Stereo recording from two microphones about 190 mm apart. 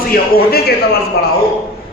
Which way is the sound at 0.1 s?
55° left (ahead or behind).